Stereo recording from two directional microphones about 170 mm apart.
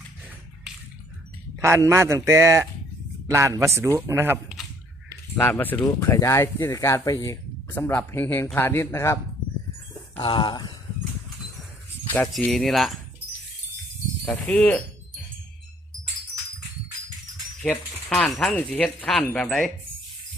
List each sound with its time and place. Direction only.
1.5 s speech: 15° right (ahead or behind)
5.0 s speech: 15° left (ahead or behind)
10.2 s speech: 30° left (ahead or behind)
12.3 s speech: centre (ahead or behind)
14.4 s speech: 5° left (ahead or behind)
17.6 s speech: 5° left (ahead or behind)